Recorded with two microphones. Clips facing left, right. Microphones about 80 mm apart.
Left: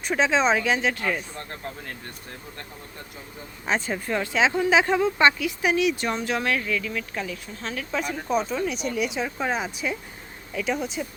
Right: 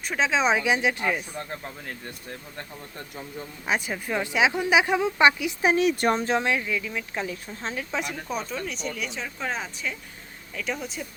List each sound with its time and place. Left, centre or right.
0.0 s speech: centre
3.7 s speech: centre
5.6 s speech: right
6.3 s speech: centre
8.3 s speech: centre
10.5 s speech: centre